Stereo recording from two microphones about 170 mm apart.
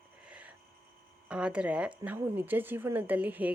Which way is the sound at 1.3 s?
5° right (ahead or behind).